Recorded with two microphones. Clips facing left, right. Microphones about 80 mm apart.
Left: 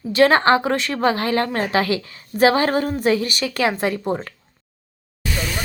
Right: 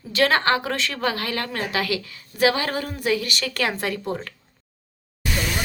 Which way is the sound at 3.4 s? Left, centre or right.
Centre.